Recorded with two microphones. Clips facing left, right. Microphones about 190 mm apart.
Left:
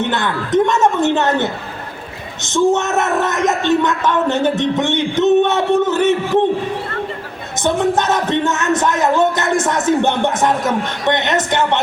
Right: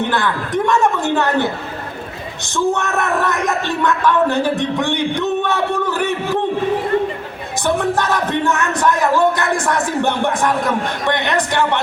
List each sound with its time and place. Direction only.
0.0 s music: 20° left (ahead or behind)
7.6 s music: 20° left (ahead or behind)